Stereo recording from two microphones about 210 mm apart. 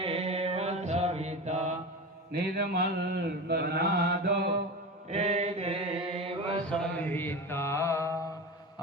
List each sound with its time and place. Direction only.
0.0 s mantra: 30° right (ahead or behind)
2.3 s mantra: 45° right (ahead or behind)
5.1 s chant: 30° right (ahead or behind)
6.7 s music: 5° left (ahead or behind)